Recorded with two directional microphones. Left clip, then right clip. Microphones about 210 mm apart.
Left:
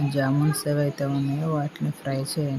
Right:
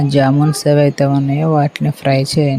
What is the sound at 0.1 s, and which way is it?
Speech, 35° right (ahead or behind).